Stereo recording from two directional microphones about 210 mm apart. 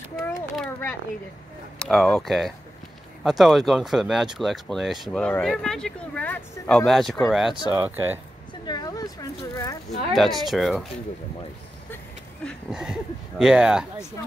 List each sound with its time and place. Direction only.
0.6 s a sound: 10° left (ahead or behind)
1.8 s speech: 5° left (ahead or behind)
8.6 s speech: 20° left (ahead or behind)
10.1 s speech: centre (ahead or behind)
12.4 s speech: centre (ahead or behind)